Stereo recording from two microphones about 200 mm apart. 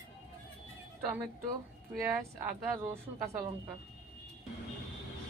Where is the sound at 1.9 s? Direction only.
10° right (ahead or behind).